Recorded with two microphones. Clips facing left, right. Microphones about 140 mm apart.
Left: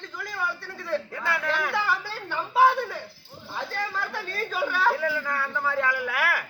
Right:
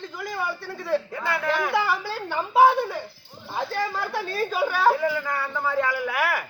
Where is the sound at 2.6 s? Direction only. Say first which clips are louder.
Right 2 dB; 25° right (ahead or behind).